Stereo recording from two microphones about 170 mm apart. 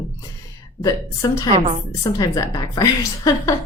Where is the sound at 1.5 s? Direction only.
40° right (ahead or behind).